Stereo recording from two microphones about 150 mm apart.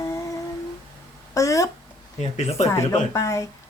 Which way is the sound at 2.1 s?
50° left (ahead or behind).